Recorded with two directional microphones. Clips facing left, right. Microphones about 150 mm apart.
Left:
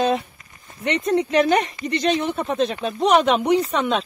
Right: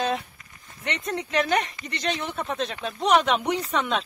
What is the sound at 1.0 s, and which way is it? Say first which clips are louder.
Speech: left 7 dB; 25° left (ahead or behind).